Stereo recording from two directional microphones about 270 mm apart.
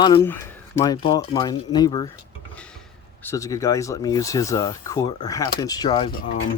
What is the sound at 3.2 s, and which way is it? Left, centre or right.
Speech, centre.